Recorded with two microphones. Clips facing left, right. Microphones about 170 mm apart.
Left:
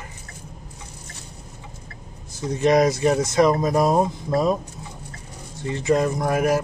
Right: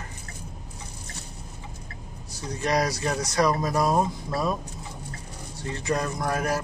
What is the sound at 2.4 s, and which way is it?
Speech, 25° left (ahead or behind).